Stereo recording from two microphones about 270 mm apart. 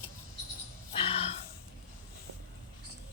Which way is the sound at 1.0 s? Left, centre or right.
Left.